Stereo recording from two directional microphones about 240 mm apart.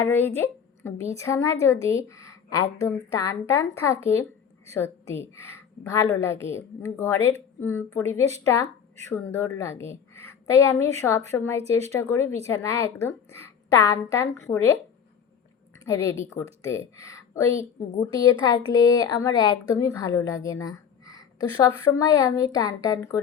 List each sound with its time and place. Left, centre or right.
0.0 s a woman's voice: centre
11.5 s speech: right
11.9 s a woman's voice: centre
15.8 s a woman's voice: centre